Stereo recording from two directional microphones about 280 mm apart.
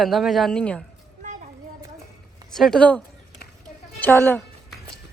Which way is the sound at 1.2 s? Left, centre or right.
Right.